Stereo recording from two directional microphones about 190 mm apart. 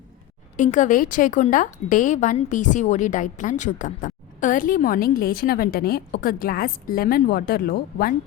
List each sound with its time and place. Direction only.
0.5 s a woman's voice: 40° left (ahead or behind)